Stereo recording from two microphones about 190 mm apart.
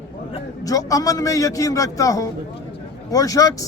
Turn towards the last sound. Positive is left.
turn(degrees=20)  # may be behind; listen again after turning